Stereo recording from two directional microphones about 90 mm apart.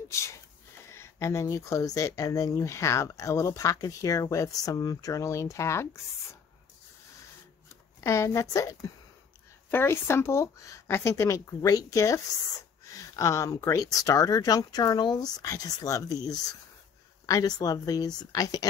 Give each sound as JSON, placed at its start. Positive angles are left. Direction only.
{"t": 0.1, "sound": "speech", "side_deg": 30}
{"t": 8.0, "sound": "speech", "side_deg": 35}
{"t": 9.7, "sound": "speech", "side_deg": 25}
{"t": 17.3, "sound": "speech", "side_deg": 40}